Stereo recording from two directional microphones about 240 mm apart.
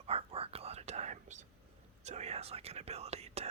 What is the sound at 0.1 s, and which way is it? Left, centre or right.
Whispering, right.